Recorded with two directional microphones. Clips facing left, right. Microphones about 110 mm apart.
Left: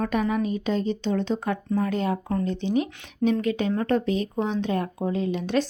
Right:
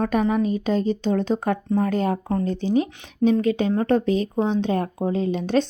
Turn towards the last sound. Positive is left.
turn(degrees=-30)  # may be behind; listen again after turning